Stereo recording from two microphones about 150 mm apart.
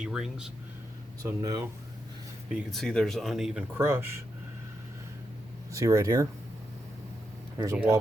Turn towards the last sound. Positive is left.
turn(degrees=-20)  # may be behind; listen again after turning